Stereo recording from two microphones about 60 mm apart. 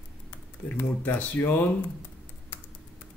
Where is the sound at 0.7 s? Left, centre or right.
Left.